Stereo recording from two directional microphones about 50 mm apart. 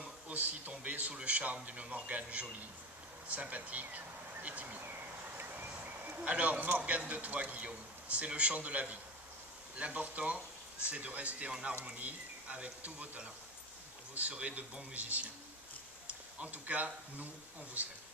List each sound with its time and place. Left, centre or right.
0.0 s a sound: right
0.7 s speech: right
6.2 s speech: right
14.3 s speech: right